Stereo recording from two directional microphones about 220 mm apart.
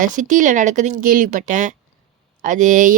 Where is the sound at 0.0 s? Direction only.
35° right (ahead or behind).